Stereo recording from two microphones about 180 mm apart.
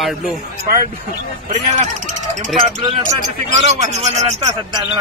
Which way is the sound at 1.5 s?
45° right (ahead or behind).